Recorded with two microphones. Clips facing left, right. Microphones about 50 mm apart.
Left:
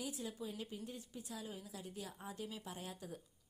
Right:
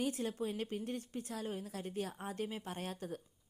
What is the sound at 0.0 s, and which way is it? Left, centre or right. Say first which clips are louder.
A woman's voice: right 8 dB; right.